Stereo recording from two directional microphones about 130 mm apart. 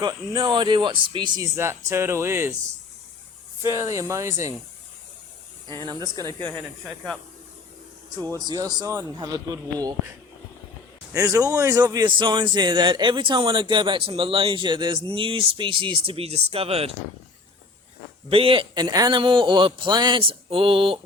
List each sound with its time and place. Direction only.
0.0 s a man's voice: 35° right (ahead or behind)
1.4 s a man's voice: 20° right (ahead or behind)
3.6 s a man's voice: 20° right (ahead or behind)
5.7 s a man's voice: 35° right (ahead or behind)
6.8 s speech: 5° left (ahead or behind)
8.2 s a man's voice: 30° right (ahead or behind)
11.1 s a man's voice: 25° right (ahead or behind); by 16.9 s 50° right (ahead or behind)
18.3 s a man's voice: 45° right (ahead or behind)